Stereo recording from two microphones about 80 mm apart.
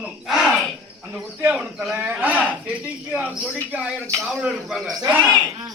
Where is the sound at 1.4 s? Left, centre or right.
Right.